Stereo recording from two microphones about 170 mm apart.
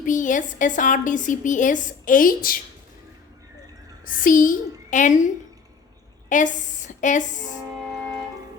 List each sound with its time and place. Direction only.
0.0 s a woman's voice: 50° left (ahead or behind)
4.0 s a woman's voice: 50° left (ahead or behind)